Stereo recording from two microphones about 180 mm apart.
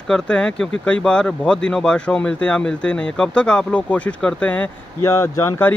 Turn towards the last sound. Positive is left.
turn(degrees=15)  # may be behind; listen again after turning